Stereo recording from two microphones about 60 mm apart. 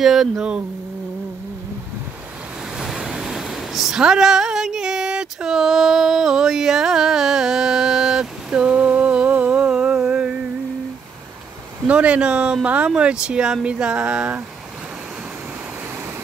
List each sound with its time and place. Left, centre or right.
0.0 s speech: centre
2.8 s waves: centre
11.9 s speech: right